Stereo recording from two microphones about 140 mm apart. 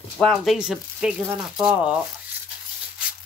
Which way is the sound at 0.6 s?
5° right (ahead or behind).